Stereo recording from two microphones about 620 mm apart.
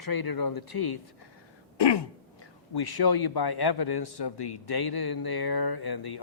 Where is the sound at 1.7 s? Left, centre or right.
Left.